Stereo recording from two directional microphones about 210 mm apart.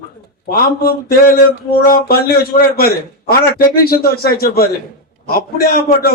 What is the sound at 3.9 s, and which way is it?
A man's voice, 45° left (ahead or behind).